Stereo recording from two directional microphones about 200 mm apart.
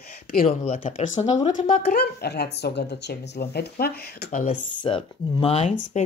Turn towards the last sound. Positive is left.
turn(degrees=35)  # may be behind; listen again after turning